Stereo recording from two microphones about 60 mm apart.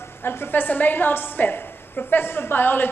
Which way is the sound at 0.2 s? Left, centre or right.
Left.